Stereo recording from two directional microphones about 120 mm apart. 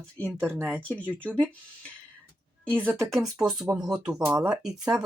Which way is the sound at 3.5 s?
5° right (ahead or behind).